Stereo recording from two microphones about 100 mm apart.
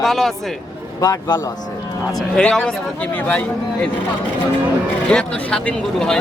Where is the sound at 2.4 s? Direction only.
10° left (ahead or behind).